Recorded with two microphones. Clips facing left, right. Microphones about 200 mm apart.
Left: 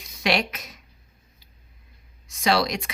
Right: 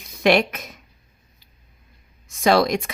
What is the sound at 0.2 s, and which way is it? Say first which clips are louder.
Speech: right 7 dB; 55° right (ahead or behind).